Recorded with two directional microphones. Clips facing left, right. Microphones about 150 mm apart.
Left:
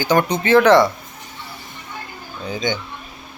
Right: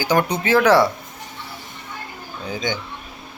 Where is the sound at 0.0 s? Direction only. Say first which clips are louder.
Left 2 dB; 10° right (ahead or behind).